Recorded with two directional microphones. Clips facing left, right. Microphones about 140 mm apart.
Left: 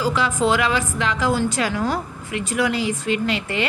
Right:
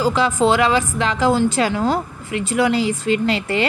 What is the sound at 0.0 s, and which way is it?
A woman's voice, 30° right (ahead or behind).